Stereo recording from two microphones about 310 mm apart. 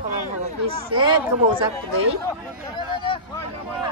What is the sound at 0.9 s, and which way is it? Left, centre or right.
Speech, centre.